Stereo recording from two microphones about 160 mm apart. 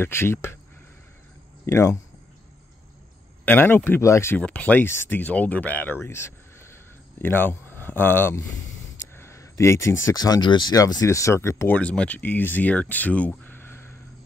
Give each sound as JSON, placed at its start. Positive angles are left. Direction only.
{"t": 0.0, "sound": "speech", "side_deg": 15}
{"t": 1.7, "sound": "speech", "side_deg": 15}
{"t": 3.4, "sound": "speech", "side_deg": 15}